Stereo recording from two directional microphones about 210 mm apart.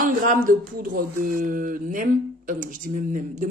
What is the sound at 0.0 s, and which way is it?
Speech, 40° right (ahead or behind).